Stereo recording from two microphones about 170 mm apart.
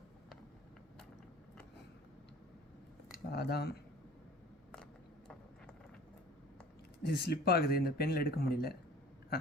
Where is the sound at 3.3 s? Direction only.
70° left (ahead or behind).